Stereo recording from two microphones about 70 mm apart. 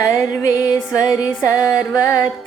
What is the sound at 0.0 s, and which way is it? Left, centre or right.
Music, left.